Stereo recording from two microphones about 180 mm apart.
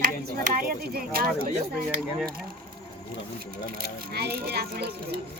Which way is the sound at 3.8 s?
60° right (ahead or behind).